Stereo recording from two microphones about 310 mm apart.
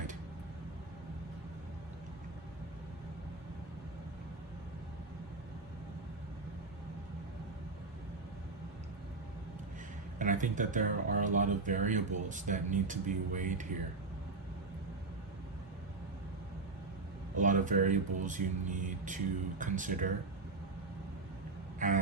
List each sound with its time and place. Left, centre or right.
10.2 s speech: right
17.4 s speech: right
21.8 s a sound: right